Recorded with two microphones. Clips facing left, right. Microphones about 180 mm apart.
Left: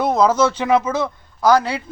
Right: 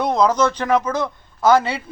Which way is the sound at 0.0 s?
5° left (ahead or behind).